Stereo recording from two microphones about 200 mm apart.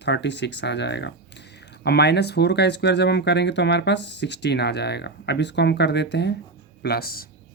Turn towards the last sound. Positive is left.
turn(degrees=50)  # may be behind; listen again after turning